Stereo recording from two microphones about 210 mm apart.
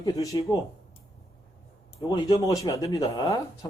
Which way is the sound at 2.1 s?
20° left (ahead or behind).